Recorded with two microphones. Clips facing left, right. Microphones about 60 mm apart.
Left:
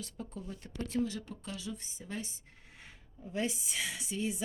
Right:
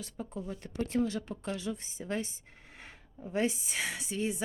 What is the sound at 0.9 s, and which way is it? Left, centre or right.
Speech, right.